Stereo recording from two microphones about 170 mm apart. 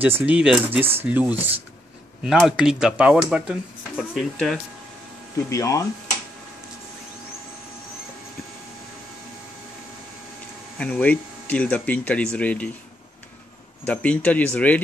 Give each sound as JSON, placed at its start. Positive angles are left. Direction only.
{"t": 0.0, "sound": "speech", "side_deg": -10}
{"t": 5.5, "sound": "speech", "side_deg": 20}
{"t": 10.8, "sound": "speech", "side_deg": 5}
{"t": 13.8, "sound": "speech", "side_deg": 10}